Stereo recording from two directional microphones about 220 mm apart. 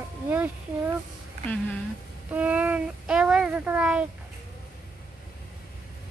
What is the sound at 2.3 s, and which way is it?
Speech, 5° right (ahead or behind).